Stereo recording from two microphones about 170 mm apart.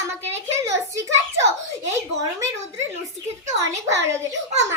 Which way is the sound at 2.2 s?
20° right (ahead or behind).